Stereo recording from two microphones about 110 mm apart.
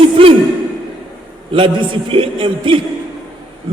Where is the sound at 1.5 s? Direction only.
50° right (ahead or behind).